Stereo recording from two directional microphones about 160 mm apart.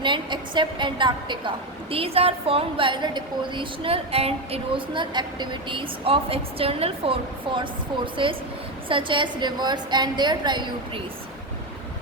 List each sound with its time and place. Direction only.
0.0 s a woman's voice: 30° right (ahead or behind)